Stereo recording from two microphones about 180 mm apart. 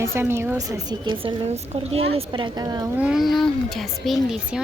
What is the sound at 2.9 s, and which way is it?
Speech, 5° right (ahead or behind).